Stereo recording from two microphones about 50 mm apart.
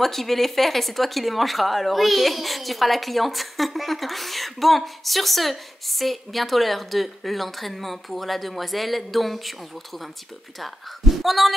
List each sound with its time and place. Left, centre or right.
0.0 s a woman's voice: centre